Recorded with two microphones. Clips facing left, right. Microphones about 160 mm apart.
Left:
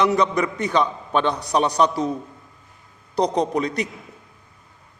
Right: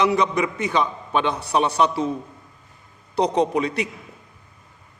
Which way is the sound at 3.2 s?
35° left (ahead or behind).